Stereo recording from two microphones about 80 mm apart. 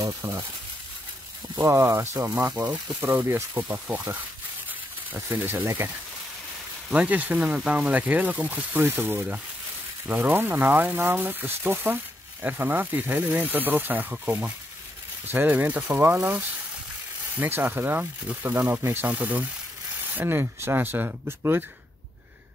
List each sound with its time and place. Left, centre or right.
0.0 s speech: right
1.5 s speech: right; by 3.0 s centre
3.0 s speech: right
6.9 s speech: centre